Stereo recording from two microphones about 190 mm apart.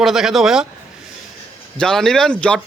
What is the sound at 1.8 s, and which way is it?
Speech, 5° left (ahead or behind).